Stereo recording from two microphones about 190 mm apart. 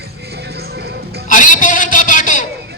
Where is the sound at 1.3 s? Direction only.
45° left (ahead or behind).